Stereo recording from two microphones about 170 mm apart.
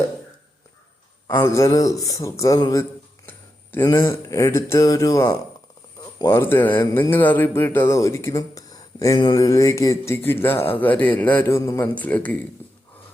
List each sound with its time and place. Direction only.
1.3 s a man's voice: 20° left (ahead or behind)
6.4 s speech: 10° left (ahead or behind)